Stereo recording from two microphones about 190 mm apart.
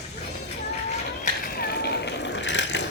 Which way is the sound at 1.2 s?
55° left (ahead or behind).